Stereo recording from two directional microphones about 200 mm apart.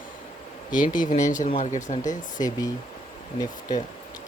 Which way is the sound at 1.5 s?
35° left (ahead or behind).